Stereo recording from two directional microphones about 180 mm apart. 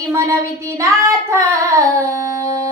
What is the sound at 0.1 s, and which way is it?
Child singing, 15° right (ahead or behind).